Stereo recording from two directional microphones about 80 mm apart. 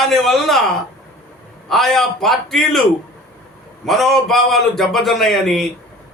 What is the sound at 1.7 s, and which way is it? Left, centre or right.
A man's voice, centre.